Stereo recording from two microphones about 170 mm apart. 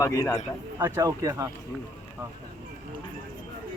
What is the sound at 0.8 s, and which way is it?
Speech, 15° right (ahead or behind).